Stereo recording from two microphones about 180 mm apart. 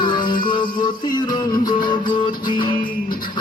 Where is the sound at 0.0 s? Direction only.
25° left (ahead or behind).